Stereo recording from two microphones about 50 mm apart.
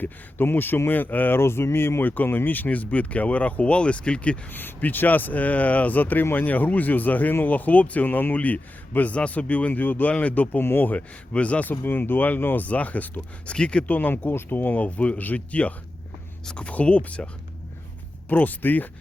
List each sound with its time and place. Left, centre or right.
0.0 s a man's voice: left
1.4 s speech: left
4.5 s a man's voice: left
10.6 s speech: left
10.9 s speech: left
11.7 s a man's voice: left
13.5 s speech: left
13.8 s a man's voice: left
18.3 s a man's voice: left